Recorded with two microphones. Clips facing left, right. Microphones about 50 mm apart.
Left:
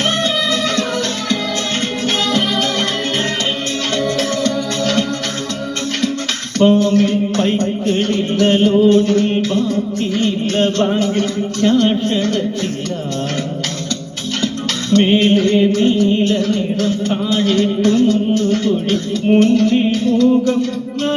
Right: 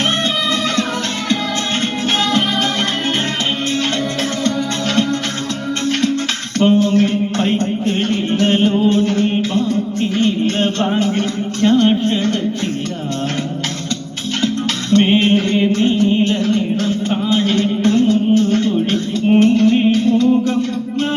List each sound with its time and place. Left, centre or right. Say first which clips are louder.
4.4 s music: left 1 dB; centre
6.6 s music: left 1 dB; centre
14.4 s music: right 2 dB; centre